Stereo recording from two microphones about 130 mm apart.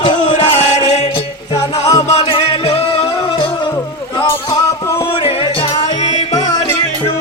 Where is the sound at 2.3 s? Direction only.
45° left (ahead or behind).